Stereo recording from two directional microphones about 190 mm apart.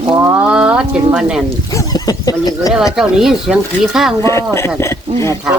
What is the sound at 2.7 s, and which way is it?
Speech, 5° right (ahead or behind).